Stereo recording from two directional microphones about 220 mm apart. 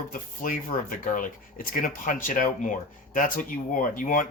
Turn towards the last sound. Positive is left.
turn(degrees=40)  # may be behind; listen again after turning